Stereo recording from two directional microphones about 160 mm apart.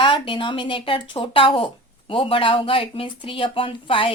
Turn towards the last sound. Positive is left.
turn(degrees=35)  # may be behind; listen again after turning